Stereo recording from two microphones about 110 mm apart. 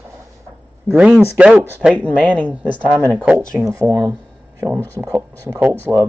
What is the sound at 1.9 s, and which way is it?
Speech, 10° left (ahead or behind).